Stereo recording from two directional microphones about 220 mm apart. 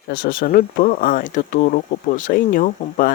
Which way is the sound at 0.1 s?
45° left (ahead or behind).